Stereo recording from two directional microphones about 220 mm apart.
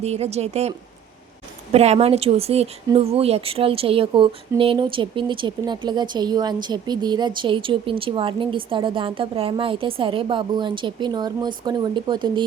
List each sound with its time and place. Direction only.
0.0 s speech: 30° right (ahead or behind)
1.7 s speech: 30° right (ahead or behind)